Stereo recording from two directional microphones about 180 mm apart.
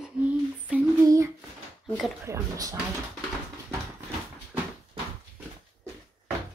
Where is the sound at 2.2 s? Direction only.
15° right (ahead or behind).